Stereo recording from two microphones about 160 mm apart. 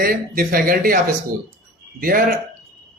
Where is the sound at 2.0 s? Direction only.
65° right (ahead or behind).